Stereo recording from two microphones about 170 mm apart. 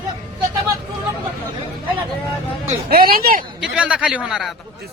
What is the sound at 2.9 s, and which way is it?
Speech, 60° right (ahead or behind).